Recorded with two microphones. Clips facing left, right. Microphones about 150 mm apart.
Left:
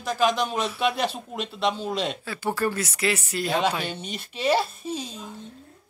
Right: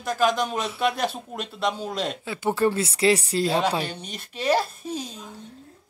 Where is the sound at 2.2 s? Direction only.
20° right (ahead or behind).